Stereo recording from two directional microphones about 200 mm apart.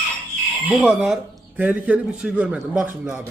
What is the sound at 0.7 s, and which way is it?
A man's voice, 5° right (ahead or behind).